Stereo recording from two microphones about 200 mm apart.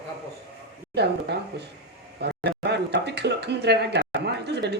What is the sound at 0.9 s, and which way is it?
Speech, 55° right (ahead or behind).